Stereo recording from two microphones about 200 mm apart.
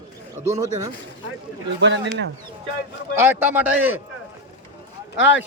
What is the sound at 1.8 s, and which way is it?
Speech, 65° right (ahead or behind).